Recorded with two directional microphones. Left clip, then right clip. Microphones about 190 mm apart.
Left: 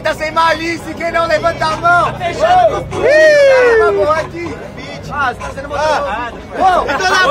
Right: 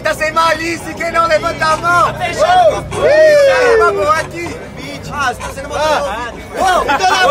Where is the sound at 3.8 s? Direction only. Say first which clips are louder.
Even; centre (ahead or behind).